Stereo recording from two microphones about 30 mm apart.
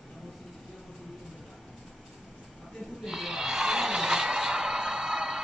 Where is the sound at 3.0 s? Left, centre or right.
Centre.